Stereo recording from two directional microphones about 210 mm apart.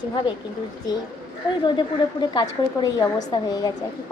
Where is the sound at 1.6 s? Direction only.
20° left (ahead or behind).